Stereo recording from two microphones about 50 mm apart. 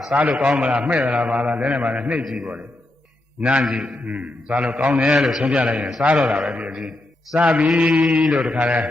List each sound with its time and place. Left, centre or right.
0.2 s a man's voice: right
2.2 s mantra: centre
3.4 s a man's voice: right
5.0 s mantra: centre
5.4 s a man's voice: centre
6.3 s mantra: centre
6.7 s a man's voice: centre
7.7 s mantra: centre
8.5 s a man's voice: right